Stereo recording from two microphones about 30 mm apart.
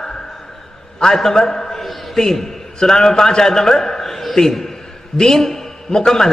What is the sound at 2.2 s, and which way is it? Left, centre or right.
A man's voice, centre.